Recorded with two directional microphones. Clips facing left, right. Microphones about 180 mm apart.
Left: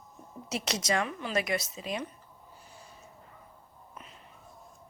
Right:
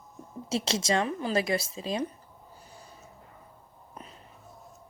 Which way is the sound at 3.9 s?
35° right (ahead or behind).